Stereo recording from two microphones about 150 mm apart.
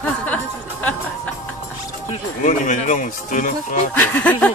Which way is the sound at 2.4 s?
55° left (ahead or behind).